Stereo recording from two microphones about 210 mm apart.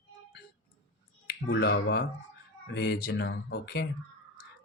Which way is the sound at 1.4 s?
60° left (ahead or behind).